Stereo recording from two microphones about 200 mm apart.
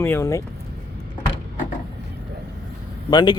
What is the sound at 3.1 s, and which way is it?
Speech, 20° left (ahead or behind).